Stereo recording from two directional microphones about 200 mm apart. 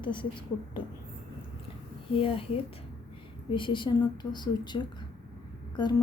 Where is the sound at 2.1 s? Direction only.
25° left (ahead or behind).